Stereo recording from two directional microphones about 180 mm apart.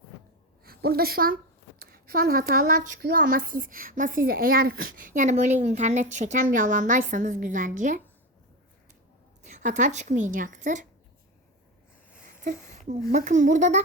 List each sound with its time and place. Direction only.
0.6 s a woman's voice: 55° right (ahead or behind)
9.4 s a woman's voice: 40° right (ahead or behind)
13.1 s a woman's voice: 45° right (ahead or behind)